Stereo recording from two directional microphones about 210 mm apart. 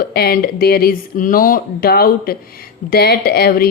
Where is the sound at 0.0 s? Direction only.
50° left (ahead or behind).